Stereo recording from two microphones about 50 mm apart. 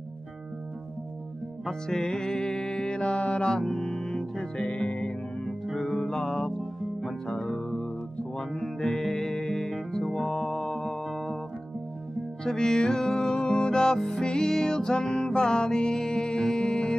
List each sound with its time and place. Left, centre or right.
1.7 s music: centre
12.4 s music: centre